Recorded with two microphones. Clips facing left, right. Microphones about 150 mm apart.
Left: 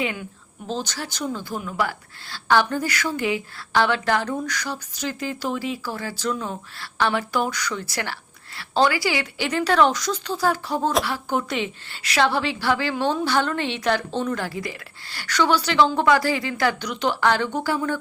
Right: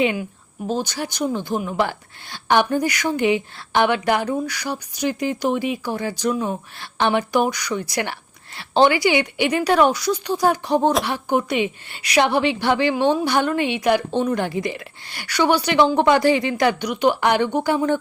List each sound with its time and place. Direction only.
0.0 s a woman's voice: 20° right (ahead or behind)